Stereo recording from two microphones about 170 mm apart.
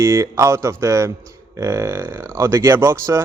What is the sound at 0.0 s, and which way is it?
A man's voice, 15° right (ahead or behind).